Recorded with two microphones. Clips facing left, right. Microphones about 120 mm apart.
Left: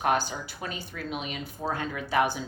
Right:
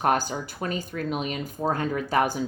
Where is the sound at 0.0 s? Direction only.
45° right (ahead or behind).